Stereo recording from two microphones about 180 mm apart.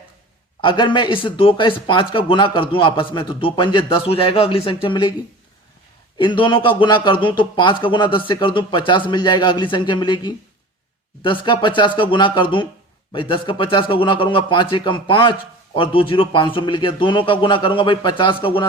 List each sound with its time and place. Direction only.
0.6 s a man's voice: 25° left (ahead or behind)
6.1 s a man's voice: 25° left (ahead or behind)